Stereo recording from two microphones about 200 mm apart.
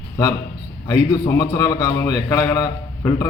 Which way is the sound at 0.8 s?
15° left (ahead or behind).